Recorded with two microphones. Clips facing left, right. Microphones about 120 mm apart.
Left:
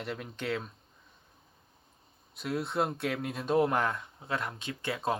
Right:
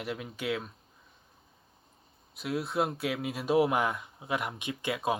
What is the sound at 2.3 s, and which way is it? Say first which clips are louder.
Speech: right 1 dB; centre (ahead or behind).